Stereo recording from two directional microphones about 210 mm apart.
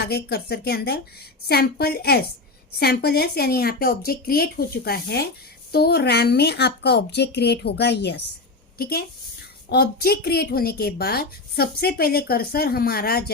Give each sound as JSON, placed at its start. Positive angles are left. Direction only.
{"t": 0.0, "sound": "a woman's voice", "side_deg": 50}